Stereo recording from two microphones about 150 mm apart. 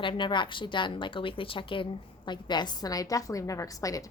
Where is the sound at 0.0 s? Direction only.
35° left (ahead or behind).